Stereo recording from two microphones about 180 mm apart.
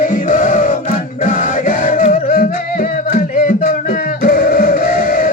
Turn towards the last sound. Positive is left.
turn(degrees=50)  # may be behind; listen again after turning